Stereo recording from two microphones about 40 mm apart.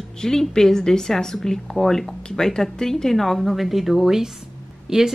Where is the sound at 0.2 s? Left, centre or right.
Centre.